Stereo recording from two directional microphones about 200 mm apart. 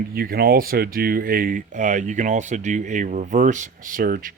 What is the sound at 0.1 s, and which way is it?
Speech, 50° right (ahead or behind).